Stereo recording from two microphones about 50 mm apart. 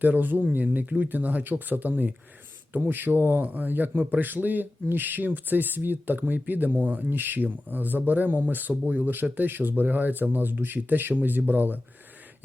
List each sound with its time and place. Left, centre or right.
0.0 s speech: right